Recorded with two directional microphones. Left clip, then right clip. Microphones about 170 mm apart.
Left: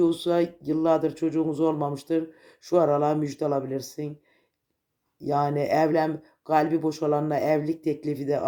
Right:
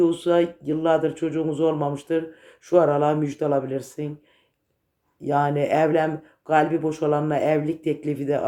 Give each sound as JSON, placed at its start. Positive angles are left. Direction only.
{"t": 0.0, "sound": "speech", "side_deg": 30}
{"t": 5.2, "sound": "speech", "side_deg": 25}